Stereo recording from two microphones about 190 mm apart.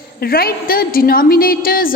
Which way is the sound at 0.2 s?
50° left (ahead or behind).